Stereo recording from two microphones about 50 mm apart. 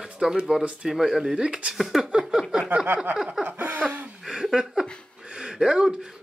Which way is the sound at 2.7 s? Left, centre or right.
Right.